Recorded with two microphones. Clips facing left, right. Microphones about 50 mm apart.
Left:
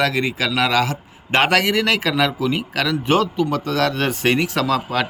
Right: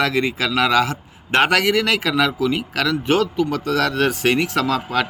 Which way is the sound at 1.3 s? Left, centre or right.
Centre.